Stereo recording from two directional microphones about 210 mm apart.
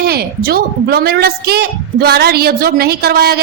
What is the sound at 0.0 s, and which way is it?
A woman's voice, 50° right (ahead or behind).